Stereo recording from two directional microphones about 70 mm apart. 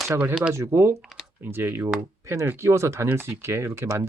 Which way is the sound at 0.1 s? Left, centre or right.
Right.